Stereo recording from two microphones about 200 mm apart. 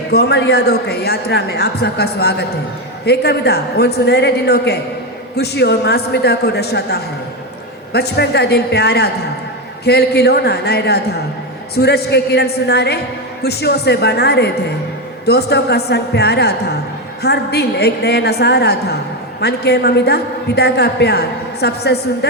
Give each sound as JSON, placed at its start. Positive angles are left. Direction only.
{"t": 0.1, "sound": "a woman's voice", "side_deg": 55}